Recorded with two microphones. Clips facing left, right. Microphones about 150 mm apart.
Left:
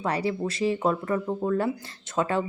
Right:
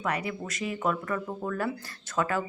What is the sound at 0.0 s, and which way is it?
Speech, 30° left (ahead or behind).